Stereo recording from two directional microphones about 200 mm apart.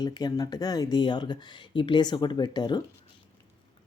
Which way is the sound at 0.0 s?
20° left (ahead or behind).